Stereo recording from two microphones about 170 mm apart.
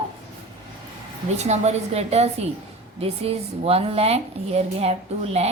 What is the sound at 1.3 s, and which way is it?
Speech, 40° right (ahead or behind).